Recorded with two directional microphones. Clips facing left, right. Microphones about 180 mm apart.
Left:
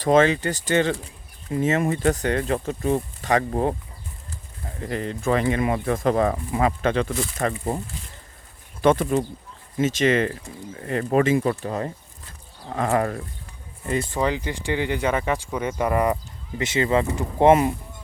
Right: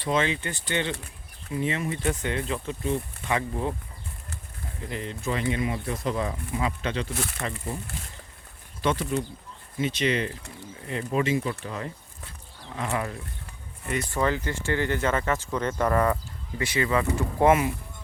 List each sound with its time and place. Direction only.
0.0 s speech: 45° left (ahead or behind)
4.9 s speech: 50° left (ahead or behind)
8.8 s speech: 50° left (ahead or behind)
12.7 s speech: 50° left (ahead or behind)
13.8 s speech: 30° left (ahead or behind)
14.1 s speech: 15° left (ahead or behind)
16.6 s speech: 25° left (ahead or behind)